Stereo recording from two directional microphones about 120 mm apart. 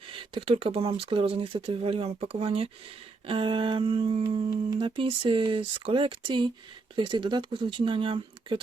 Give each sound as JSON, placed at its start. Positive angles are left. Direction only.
{"t": 0.1, "sound": "speech", "side_deg": -45}